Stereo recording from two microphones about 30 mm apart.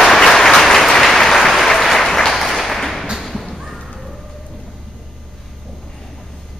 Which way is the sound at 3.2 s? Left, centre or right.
Centre.